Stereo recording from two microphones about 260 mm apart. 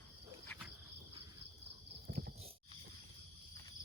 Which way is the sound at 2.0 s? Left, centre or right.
Right.